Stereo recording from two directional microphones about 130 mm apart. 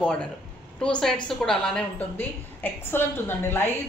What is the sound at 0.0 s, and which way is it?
A woman's voice, 5° left (ahead or behind).